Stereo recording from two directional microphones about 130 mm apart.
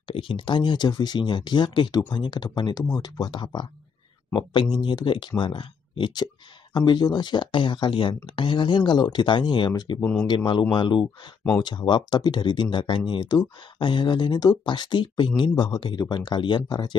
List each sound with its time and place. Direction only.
0.1 s speech: 45° left (ahead or behind)
9.9 s speech: 15° left (ahead or behind)
10.2 s speech: 35° left (ahead or behind)